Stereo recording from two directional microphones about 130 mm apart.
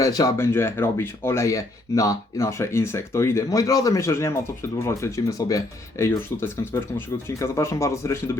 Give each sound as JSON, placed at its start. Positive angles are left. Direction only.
{"t": 0.0, "sound": "speech", "side_deg": 25}